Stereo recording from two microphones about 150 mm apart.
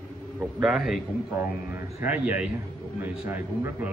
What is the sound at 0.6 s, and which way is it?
A man's voice, centre (ahead or behind).